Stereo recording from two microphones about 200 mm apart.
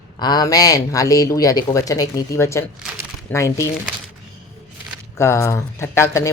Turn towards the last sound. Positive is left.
turn(degrees=15)  # may be behind; listen again after turning